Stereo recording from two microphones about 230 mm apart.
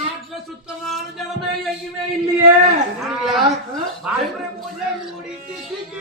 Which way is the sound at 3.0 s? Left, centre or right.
Centre.